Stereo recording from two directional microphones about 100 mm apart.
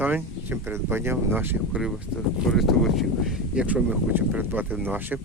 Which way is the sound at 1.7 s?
10° right (ahead or behind).